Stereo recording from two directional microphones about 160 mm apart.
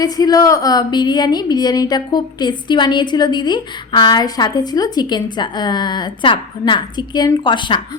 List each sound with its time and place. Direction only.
0.0 s a woman's voice: 25° left (ahead or behind)